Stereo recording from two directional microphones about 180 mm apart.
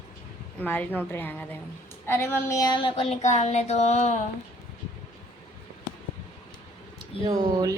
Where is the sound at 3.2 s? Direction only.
40° left (ahead or behind).